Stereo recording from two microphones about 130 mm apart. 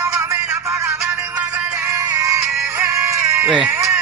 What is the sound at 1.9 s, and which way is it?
Music, 25° right (ahead or behind).